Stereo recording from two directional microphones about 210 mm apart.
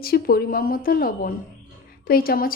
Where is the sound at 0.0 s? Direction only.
45° left (ahead or behind).